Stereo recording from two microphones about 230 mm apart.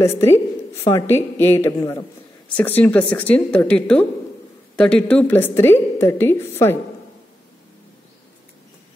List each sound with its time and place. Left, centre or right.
0.0 s a woman's voice: centre